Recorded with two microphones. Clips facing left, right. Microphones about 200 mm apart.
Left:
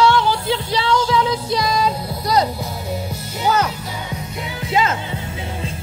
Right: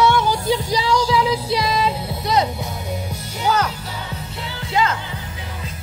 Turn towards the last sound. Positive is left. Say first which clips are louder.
# left 5 dB
turn(degrees=25)  # may be behind; listen again after turning